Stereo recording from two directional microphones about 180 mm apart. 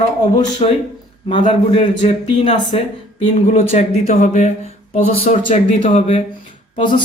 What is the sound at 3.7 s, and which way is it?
Speech, 35° left (ahead or behind).